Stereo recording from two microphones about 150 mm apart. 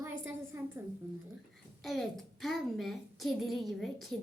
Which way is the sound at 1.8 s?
Centre (ahead or behind).